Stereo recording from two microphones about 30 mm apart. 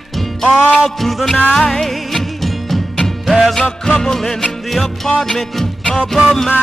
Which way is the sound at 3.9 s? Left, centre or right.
Left.